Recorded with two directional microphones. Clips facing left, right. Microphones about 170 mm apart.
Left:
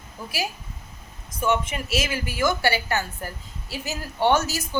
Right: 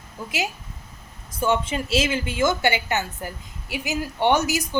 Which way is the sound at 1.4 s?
30° right (ahead or behind).